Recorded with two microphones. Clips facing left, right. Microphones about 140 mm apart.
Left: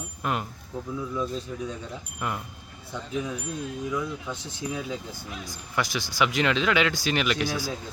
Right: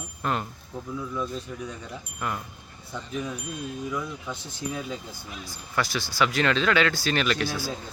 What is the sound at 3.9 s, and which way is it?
Speech, 5° left (ahead or behind).